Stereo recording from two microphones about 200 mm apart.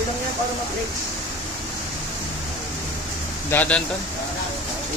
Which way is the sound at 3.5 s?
5° left (ahead or behind).